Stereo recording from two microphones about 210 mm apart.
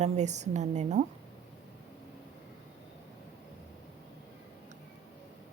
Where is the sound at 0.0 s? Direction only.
35° right (ahead or behind).